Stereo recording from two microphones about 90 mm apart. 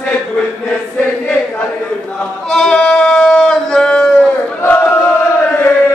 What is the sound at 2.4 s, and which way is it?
Bleat, 5° left (ahead or behind).